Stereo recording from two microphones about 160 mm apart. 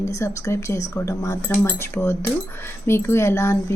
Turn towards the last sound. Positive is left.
turn(degrees=15)  # may be behind; listen again after turning